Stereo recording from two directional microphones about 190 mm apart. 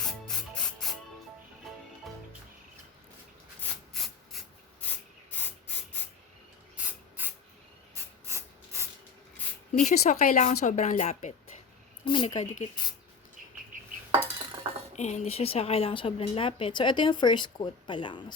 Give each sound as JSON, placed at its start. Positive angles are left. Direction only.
{"t": 0.0, "sound": "music", "side_deg": 5}
{"t": 3.6, "sound": "rub", "side_deg": 0}
{"t": 6.8, "sound": "spray", "side_deg": -10}
{"t": 8.0, "sound": "hiss", "side_deg": -15}
{"t": 8.3, "sound": "a sound", "side_deg": -15}
{"t": 9.7, "sound": "speech", "side_deg": 40}
{"t": 12.0, "sound": "a woman's voice", "side_deg": 25}
{"t": 12.3, "sound": "speech", "side_deg": 40}
{"t": 14.9, "sound": "a woman's voice", "side_deg": 35}